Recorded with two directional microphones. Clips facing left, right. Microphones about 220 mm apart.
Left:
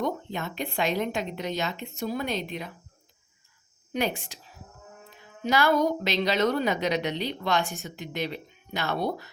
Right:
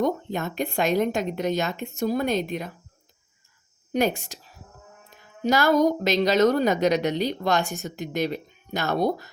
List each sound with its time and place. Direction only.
0.0 s a woman's voice: 45° right (ahead or behind)
3.9 s a woman's voice: 45° right (ahead or behind)
5.4 s a woman's voice: 40° right (ahead or behind)